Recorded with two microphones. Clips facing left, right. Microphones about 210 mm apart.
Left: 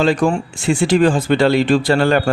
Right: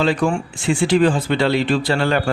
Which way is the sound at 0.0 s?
45° left (ahead or behind).